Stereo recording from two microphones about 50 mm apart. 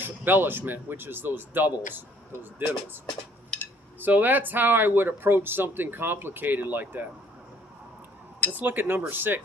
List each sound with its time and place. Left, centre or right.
0.0 s speech: right
4.0 s speech: right
8.5 s speech: right